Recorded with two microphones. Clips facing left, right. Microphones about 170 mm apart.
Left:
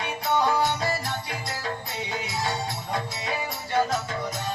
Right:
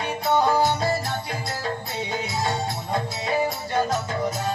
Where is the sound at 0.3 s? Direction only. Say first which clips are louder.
Right 3 dB; 30° right (ahead or behind).